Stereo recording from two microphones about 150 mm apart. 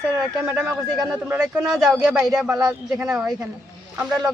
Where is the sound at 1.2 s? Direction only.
10° right (ahead or behind).